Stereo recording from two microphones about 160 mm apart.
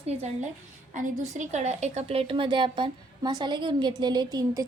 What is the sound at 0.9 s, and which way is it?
A woman's voice, 50° right (ahead or behind).